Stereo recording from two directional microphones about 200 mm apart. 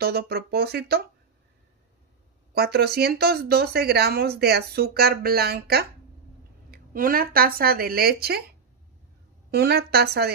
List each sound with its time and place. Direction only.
0.0 s speech: 50° right (ahead or behind)
2.5 s speech: 50° right (ahead or behind)
9.5 s speech: 50° right (ahead or behind)